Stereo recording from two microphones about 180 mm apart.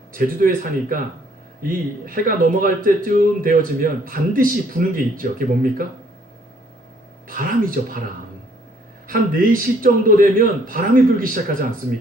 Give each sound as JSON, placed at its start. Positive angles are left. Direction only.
{"t": 0.1, "sound": "speech", "side_deg": -50}
{"t": 2.0, "sound": "speech", "side_deg": -50}
{"t": 7.3, "sound": "speech", "side_deg": -50}
{"t": 9.0, "sound": "speech", "side_deg": -50}